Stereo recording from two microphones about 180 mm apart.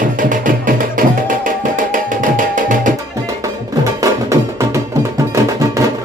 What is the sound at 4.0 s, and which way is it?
Music, 15° right (ahead or behind).